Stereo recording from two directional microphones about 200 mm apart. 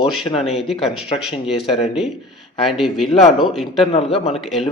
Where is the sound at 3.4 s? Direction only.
Centre (ahead or behind).